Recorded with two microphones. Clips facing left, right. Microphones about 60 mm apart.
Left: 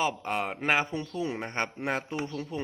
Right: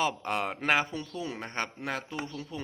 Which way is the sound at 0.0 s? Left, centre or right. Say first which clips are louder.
Even; centre.